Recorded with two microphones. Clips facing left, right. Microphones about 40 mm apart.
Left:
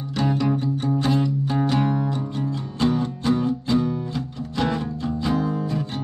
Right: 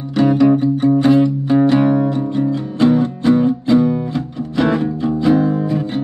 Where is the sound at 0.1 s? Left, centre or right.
Centre.